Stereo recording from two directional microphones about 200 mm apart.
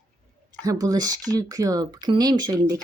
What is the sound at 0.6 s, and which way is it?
Speech, 20° right (ahead or behind).